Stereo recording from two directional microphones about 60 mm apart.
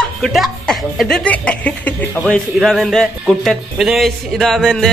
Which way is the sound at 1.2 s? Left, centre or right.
Left.